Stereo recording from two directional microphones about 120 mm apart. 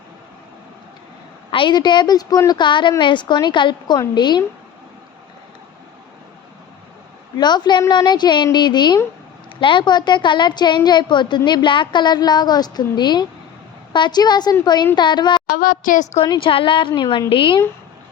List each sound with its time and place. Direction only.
1.5 s a woman's voice: 45° left (ahead or behind)
7.3 s a woman's voice: 35° left (ahead or behind)